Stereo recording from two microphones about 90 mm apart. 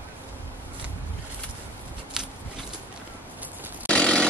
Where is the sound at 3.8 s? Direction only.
10° left (ahead or behind).